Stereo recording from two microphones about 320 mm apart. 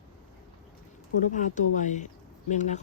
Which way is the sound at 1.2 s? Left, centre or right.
Left.